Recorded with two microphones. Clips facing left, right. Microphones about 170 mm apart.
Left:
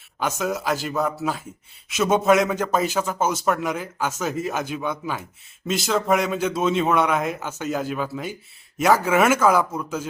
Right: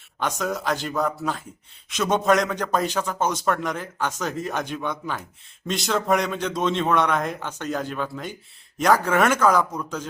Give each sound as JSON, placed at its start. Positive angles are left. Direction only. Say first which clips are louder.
{"t": 0.2, "sound": "a man's voice", "louder": "left 1 dB", "side_deg": 5}